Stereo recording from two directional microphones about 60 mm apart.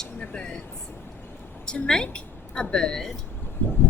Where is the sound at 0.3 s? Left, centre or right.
Left.